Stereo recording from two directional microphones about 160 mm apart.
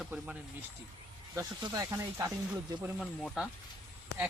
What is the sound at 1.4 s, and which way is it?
Speech, 20° right (ahead or behind).